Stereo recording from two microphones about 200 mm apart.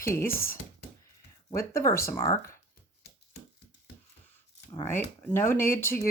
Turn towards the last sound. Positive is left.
turn(degrees=10)  # may be behind; listen again after turning